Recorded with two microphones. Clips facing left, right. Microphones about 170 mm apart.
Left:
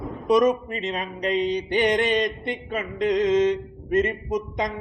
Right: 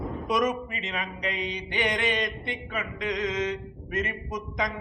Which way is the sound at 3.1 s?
25° left (ahead or behind).